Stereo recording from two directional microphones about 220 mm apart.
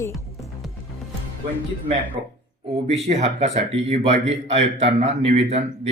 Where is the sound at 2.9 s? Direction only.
30° right (ahead or behind).